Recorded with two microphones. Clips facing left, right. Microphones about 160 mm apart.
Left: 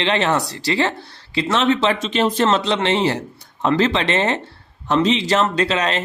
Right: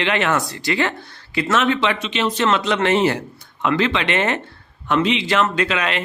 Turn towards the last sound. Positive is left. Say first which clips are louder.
# left 2 dB
turn(degrees=35)  # may be behind; listen again after turning